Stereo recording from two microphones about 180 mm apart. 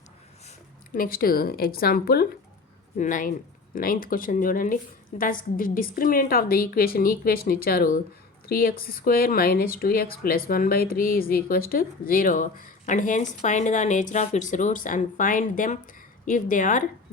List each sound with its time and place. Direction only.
0.9 s a woman's voice: 55° left (ahead or behind)